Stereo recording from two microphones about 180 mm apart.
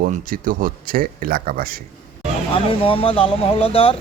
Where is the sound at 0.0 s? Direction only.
50° right (ahead or behind).